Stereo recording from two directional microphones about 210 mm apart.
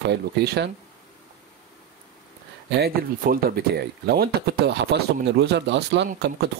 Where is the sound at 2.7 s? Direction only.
45° right (ahead or behind).